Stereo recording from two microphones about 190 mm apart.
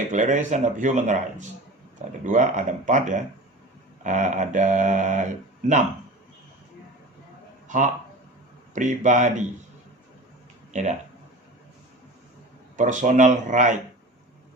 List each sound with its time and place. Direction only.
0.1 s speech: 40° right (ahead or behind)
8.7 s speech: 40° right (ahead or behind)
10.7 s speech: 40° right (ahead or behind)
12.7 s speech: 40° right (ahead or behind)